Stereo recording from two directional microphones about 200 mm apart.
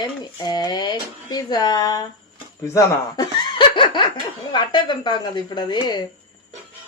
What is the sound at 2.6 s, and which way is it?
Laughter, 15° left (ahead or behind).